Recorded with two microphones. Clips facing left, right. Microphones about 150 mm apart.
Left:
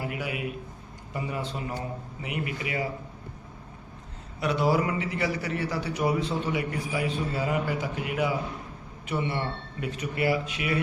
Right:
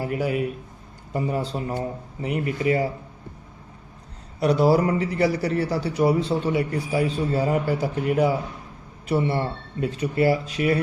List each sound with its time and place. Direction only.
0.0 s a man's voice: 40° right (ahead or behind)
4.4 s a man's voice: 40° right (ahead or behind)